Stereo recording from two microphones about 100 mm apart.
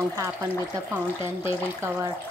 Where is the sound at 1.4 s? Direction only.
25° right (ahead or behind).